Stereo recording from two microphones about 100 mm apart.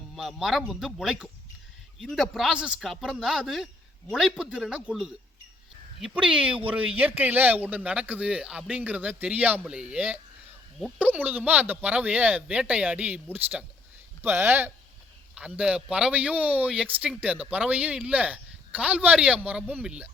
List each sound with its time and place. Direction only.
0.2 s speech: centre (ahead or behind)
6.1 s speech: 55° right (ahead or behind)
6.7 s speech: 15° right (ahead or behind)
15.4 s speech: 10° right (ahead or behind)